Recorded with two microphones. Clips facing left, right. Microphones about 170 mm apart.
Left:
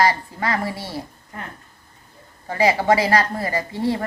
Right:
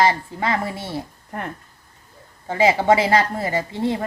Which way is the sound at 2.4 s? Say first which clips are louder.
Right 1 dB; 20° right (ahead or behind).